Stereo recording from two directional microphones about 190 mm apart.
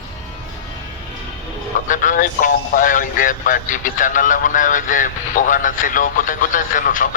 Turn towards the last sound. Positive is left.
turn(degrees=45)  # may be behind; listen again after turning